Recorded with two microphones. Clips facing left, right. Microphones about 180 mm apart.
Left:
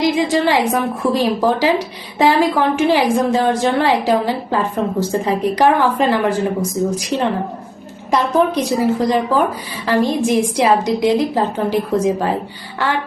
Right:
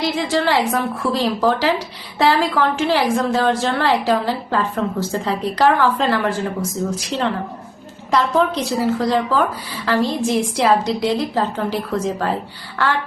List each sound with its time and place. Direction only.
0.0 s a woman's voice: 15° left (ahead or behind)